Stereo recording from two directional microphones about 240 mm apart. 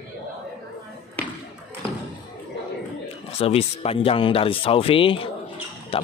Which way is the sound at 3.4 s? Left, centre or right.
Left.